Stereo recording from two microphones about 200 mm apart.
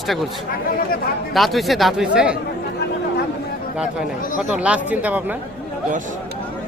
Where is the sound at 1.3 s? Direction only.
Centre (ahead or behind).